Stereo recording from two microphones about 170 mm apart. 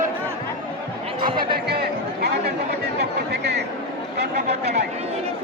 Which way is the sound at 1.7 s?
70° right (ahead or behind).